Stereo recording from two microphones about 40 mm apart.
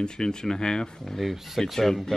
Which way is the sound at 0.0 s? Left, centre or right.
Centre.